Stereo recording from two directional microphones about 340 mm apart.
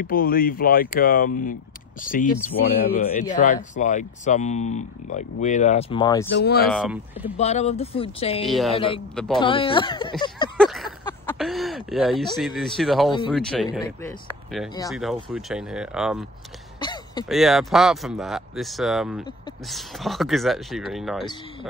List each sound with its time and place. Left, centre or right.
0.0 s speech: left
6.3 s speech: left
6.7 s speech: centre
7.3 s speech: centre
8.5 s speech: centre
8.7 s speech: centre
9.1 s speech: centre
9.4 s speech: centre
10.6 s a sound: centre
12.4 s speech: centre
16.8 s a sound: centre
17.3 s speech: centre